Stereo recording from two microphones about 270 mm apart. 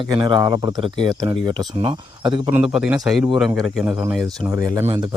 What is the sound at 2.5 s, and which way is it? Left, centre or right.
A man's voice, centre.